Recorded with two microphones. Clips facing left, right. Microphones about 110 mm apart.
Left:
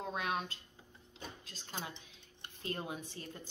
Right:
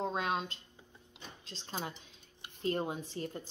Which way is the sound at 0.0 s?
30° right (ahead or behind).